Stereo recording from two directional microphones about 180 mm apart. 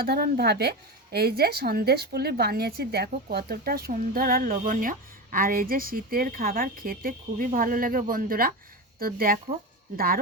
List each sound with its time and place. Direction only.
0.0 s a woman's voice: 60° right (ahead or behind)